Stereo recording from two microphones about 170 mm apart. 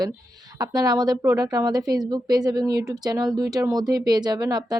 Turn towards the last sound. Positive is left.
turn(degrees=-25)  # may be behind; listen again after turning